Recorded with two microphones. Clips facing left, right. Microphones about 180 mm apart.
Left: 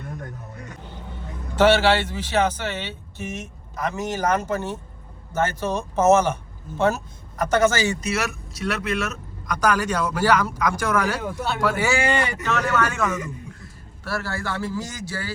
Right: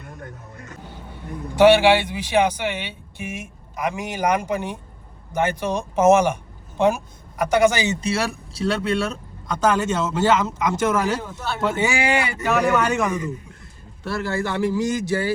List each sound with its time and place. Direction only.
1.1 s a man's voice: 10° right (ahead or behind)
8.0 s speech: 30° right (ahead or behind)